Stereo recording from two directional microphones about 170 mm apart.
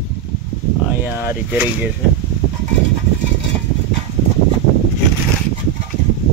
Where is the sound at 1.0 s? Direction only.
15° right (ahead or behind).